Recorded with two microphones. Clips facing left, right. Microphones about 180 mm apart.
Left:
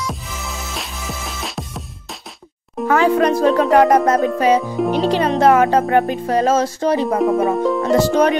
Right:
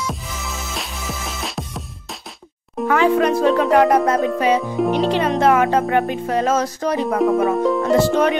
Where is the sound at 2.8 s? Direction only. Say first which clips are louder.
Left 1 dB; 40° left (ahead or behind).